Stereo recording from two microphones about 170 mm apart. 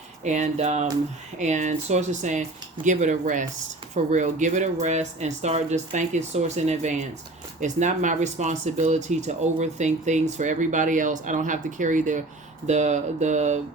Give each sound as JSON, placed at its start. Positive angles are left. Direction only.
{"t": 0.3, "sound": "speech", "side_deg": -45}